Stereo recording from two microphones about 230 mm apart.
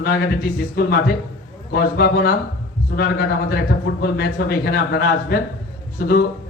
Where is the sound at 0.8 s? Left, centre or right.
Left.